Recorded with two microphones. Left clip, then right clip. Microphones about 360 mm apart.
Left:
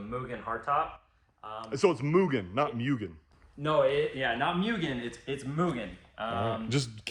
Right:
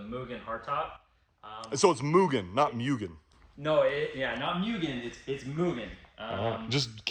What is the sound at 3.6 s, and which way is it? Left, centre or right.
Speech, centre.